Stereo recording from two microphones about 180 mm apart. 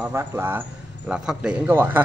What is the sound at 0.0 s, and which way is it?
Speech, 10° right (ahead or behind).